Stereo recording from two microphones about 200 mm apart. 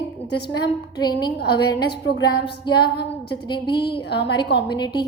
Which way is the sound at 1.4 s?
55° left (ahead or behind).